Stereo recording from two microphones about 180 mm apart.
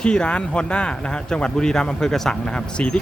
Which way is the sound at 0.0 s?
5° left (ahead or behind).